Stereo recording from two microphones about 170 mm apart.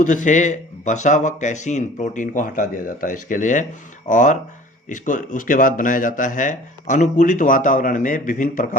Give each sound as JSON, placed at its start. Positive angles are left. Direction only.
{"t": 0.0, "sound": "speech", "side_deg": 50}